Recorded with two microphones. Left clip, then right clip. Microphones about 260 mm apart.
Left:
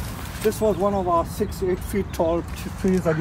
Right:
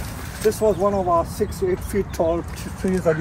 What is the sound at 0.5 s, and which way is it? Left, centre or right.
Speech, centre.